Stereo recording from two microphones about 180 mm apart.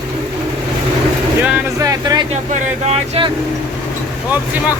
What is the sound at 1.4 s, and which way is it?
Speech, 20° right (ahead or behind).